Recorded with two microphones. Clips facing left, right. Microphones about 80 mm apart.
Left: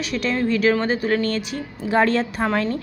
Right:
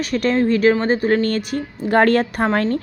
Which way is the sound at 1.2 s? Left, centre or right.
Right.